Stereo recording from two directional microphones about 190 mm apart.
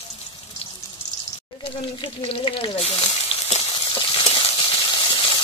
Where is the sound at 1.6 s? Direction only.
30° left (ahead or behind).